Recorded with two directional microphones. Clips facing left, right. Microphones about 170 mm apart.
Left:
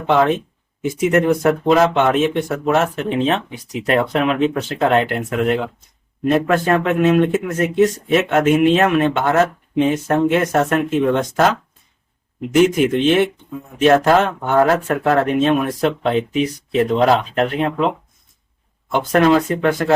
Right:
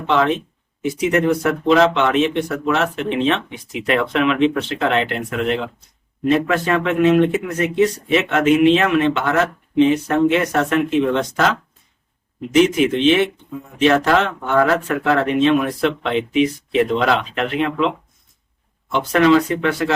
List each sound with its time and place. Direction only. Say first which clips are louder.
0.1 s speech: left 2 dB; 50° left (ahead or behind)
12.5 s speech: left 1 dB; 50° left (ahead or behind)